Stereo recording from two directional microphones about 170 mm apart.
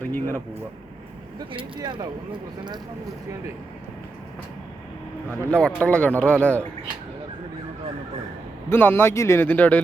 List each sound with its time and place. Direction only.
0.0 s a sound: 10° left (ahead or behind)
1.5 s speech: 25° right (ahead or behind)
5.5 s speech: 5° left (ahead or behind)
8.7 s speech: 15° left (ahead or behind)